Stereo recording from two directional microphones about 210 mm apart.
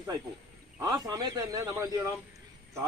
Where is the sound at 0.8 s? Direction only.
20° right (ahead or behind).